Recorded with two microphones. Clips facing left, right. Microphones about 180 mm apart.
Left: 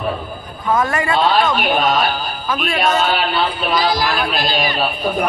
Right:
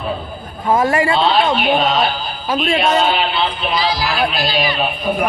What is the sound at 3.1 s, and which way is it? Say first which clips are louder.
A man's voice: even; 45° left (ahead or behind).